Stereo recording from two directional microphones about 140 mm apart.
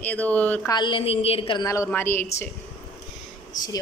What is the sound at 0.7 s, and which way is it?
Speech, 30° left (ahead or behind).